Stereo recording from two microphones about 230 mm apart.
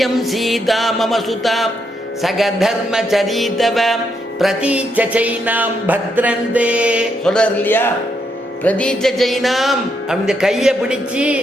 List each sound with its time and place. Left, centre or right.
0.0 s music: centre